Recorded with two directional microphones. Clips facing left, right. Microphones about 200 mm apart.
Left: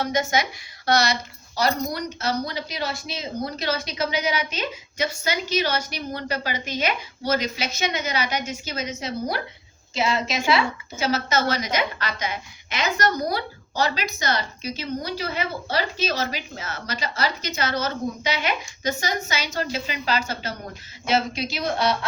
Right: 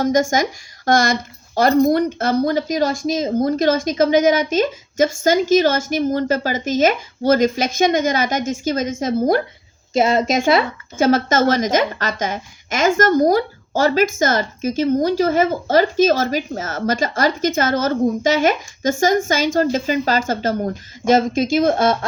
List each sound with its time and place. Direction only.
0.0 s speech: 45° right (ahead or behind)